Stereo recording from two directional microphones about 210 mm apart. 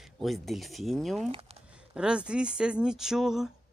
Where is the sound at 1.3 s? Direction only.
30° right (ahead or behind).